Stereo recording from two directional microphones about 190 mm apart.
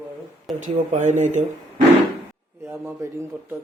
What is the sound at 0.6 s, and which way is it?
Speech, 40° right (ahead or behind).